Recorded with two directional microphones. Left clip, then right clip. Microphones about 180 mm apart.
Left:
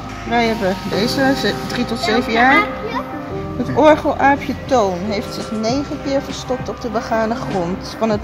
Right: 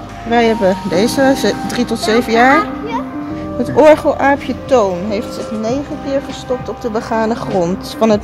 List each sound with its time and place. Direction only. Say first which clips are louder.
0.3 s speech: right 5 dB; 55° right (ahead or behind)
3.7 s speech: right 4 dB; 55° right (ahead or behind); by 5.9 s 35° right (ahead or behind)
6.9 s speech: right 2 dB; 50° right (ahead or behind)